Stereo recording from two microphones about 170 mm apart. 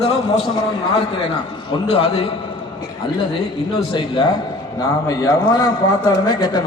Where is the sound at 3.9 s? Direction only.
30° left (ahead or behind).